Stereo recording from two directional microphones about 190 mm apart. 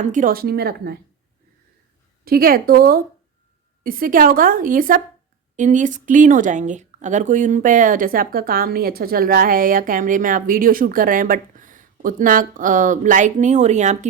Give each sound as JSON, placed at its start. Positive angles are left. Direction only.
{"t": 0.0, "sound": "speech", "side_deg": -40}
{"t": 2.2, "sound": "speech", "side_deg": -50}